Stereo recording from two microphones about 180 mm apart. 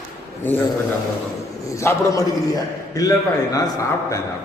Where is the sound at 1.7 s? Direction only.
15° left (ahead or behind).